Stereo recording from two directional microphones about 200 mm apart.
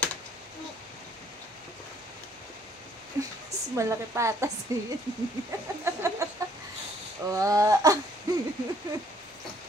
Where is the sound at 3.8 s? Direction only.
15° right (ahead or behind).